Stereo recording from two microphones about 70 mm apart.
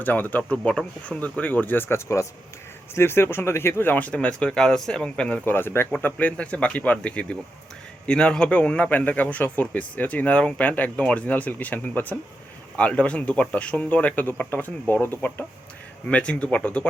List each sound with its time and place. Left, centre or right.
0.0 s a man's voice: left
5.5 s a man's voice: left
16.0 s speech: centre